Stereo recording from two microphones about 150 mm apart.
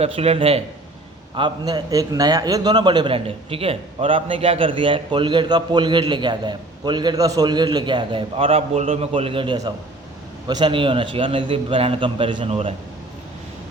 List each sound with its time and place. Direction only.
0.0 s a man's voice: 40° right (ahead or behind)
1.4 s a man's voice: 30° right (ahead or behind)